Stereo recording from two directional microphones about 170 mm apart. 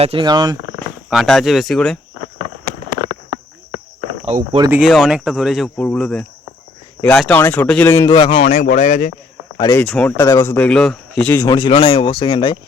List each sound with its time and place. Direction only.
0.0 s speech: 30° right (ahead or behind)
1.1 s speech: centre (ahead or behind)
4.3 s speech: 40° right (ahead or behind)
4.7 s speech: centre (ahead or behind); by 8.1 s 15° left (ahead or behind)
8.1 s speech: 30° left (ahead or behind)
8.4 s speech: 50° left (ahead or behind)
9.7 s speech: 5° left (ahead or behind)
10.2 s speech: 15° left (ahead or behind)
11.4 s speech: 25° left (ahead or behind)